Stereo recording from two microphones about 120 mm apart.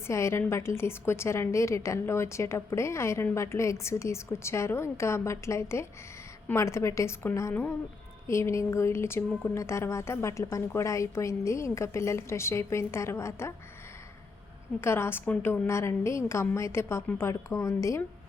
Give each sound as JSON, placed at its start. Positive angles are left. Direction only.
{"t": 0.1, "sound": "a woman's voice", "side_deg": 25}
{"t": 14.8, "sound": "a woman's voice", "side_deg": 20}